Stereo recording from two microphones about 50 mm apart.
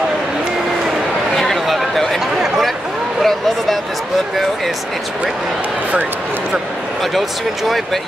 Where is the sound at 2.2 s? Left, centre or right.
Centre.